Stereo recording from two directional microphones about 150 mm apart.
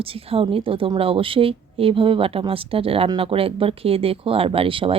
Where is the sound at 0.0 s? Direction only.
40° right (ahead or behind).